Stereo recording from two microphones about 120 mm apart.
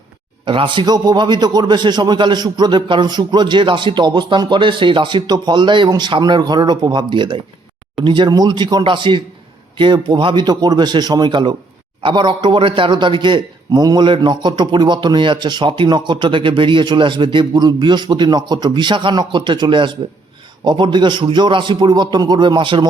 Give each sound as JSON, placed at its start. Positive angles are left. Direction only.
{"t": 0.4, "sound": "a man's voice", "side_deg": -45}